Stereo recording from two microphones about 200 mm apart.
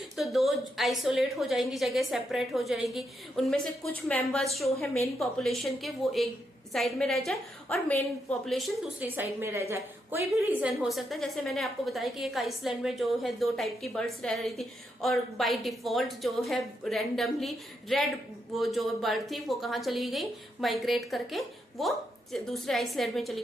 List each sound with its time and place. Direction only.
0.2 s a woman's voice: centre (ahead or behind)